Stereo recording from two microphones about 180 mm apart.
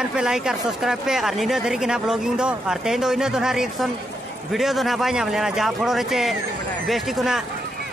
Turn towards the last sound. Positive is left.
turn(degrees=0)  # may be behind; listen again after turning